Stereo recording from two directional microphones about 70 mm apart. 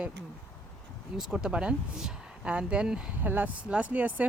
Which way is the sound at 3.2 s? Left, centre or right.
Right.